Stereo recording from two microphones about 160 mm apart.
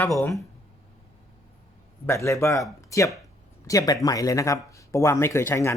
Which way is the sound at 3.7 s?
20° left (ahead or behind).